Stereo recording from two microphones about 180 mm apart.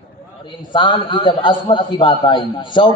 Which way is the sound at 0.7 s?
25° left (ahead or behind).